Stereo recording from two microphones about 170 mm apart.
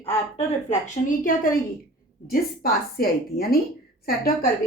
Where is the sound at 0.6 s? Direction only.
45° left (ahead or behind).